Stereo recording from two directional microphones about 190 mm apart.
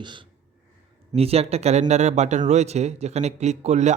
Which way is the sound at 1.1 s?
30° right (ahead or behind).